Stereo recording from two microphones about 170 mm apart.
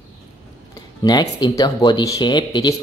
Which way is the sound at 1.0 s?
25° left (ahead or behind).